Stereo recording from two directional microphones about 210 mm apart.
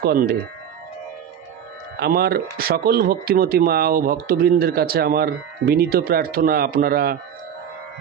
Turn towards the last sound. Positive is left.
turn(degrees=-45)  # may be behind; listen again after turning